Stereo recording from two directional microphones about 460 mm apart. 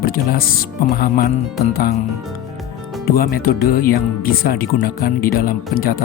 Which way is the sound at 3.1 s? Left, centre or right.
Centre.